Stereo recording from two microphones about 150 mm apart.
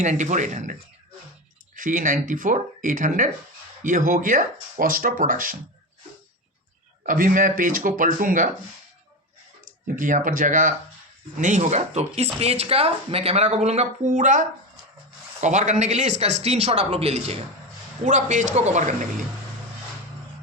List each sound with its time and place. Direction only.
0.0 s speech: 55° right (ahead or behind)
7.0 s speech: 65° right (ahead or behind)
10.0 s speech: 60° right (ahead or behind); by 17.3 s 45° right (ahead or behind)
18.0 s speech: 55° right (ahead or behind)